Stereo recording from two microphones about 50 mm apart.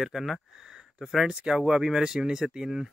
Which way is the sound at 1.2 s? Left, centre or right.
Centre.